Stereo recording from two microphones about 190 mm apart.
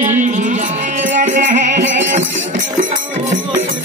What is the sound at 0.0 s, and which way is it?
Music, 40° right (ahead or behind).